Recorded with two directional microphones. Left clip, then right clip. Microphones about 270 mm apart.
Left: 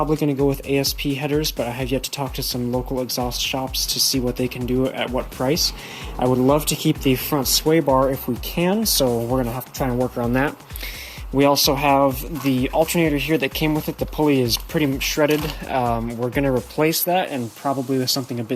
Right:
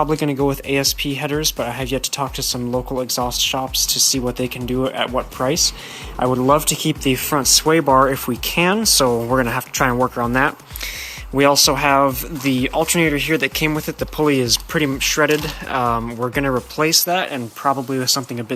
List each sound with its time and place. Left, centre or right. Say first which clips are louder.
0.0 s speech: right 2 dB; centre
7.9 s speech: right 4 dB; right
8.4 s speech: right 5 dB; centre
9.0 s speech: right 4 dB; centre
9.4 s speech: right 6 dB; right
9.7 s speech: right 5 dB; centre